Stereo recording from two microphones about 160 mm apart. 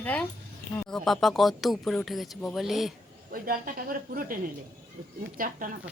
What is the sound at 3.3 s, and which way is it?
Speech, 60° right (ahead or behind).